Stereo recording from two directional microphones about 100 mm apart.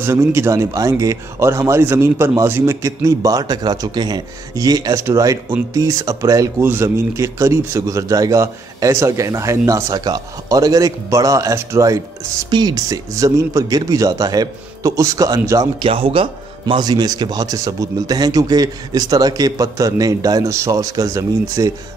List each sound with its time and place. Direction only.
0.0 s a man's voice: 25° right (ahead or behind)
6.6 s a man's voice: 25° right (ahead or behind)
12.4 s a man's voice: 45° right (ahead or behind)
15.8 s speech: 70° right (ahead or behind)
16.8 s a man's voice: 40° right (ahead or behind)